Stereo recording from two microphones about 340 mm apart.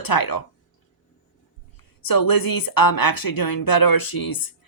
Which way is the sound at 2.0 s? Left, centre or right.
Left.